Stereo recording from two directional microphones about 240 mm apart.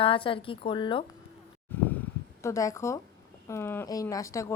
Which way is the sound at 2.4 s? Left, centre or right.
Centre.